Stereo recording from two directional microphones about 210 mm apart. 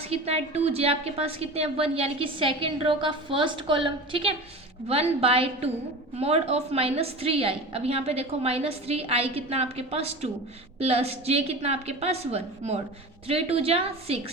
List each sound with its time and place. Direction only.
0.1 s a woman's voice: 30° right (ahead or behind)